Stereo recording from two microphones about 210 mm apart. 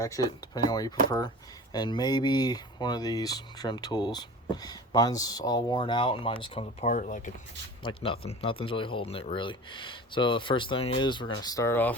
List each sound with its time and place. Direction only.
0.0 s speech: 15° left (ahead or behind); by 7.3 s 35° left (ahead or behind)
7.9 s speech: 25° left (ahead or behind); by 11.9 s 10° left (ahead or behind)